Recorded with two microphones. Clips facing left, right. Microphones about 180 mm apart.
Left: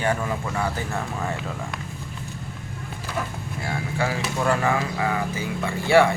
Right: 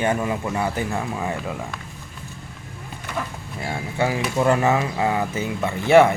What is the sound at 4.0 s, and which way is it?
Speech, 20° right (ahead or behind).